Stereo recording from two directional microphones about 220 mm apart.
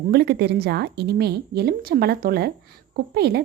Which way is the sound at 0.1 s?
45° right (ahead or behind).